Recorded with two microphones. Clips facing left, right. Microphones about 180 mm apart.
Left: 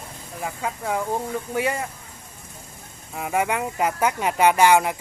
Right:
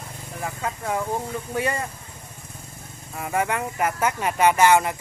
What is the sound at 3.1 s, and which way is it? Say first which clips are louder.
Speech: left 1 dB; 15° left (ahead or behind).